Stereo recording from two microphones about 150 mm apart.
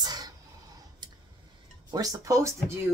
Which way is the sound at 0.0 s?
25° right (ahead or behind).